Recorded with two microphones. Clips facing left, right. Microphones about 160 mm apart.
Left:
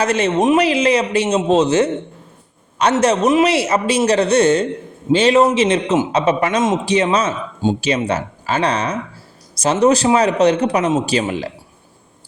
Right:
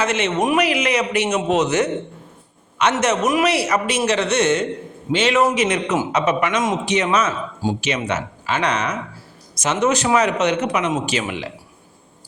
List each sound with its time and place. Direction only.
0.0 s a man's voice: 35° left (ahead or behind)